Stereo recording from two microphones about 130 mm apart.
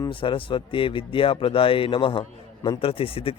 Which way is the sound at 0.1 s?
40° left (ahead or behind).